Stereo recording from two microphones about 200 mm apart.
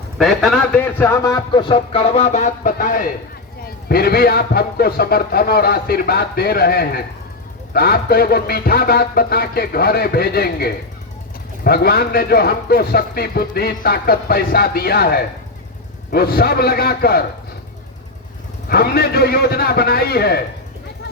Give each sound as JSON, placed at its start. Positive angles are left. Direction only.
{"t": 0.2, "sound": "a man's voice", "side_deg": 0}
{"t": 18.7, "sound": "a man's voice", "side_deg": 50}